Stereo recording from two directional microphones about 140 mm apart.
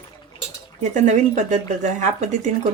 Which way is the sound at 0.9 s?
55° right (ahead or behind).